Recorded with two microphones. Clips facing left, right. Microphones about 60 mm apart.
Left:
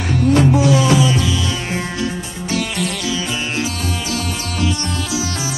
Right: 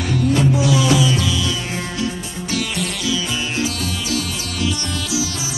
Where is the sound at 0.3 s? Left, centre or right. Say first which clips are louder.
Left 5 dB; left.